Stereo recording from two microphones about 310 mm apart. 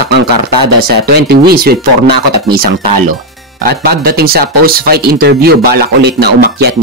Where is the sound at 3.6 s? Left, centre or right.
Right.